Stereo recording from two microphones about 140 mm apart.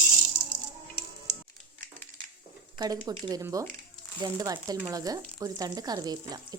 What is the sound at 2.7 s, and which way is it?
Speech, 30° right (ahead or behind).